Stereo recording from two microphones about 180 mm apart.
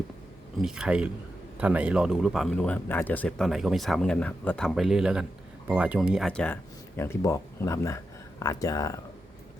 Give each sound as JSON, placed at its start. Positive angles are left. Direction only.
{"t": 0.6, "sound": "speech", "side_deg": -5}